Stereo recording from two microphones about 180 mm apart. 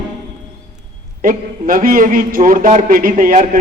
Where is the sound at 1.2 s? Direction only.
50° right (ahead or behind).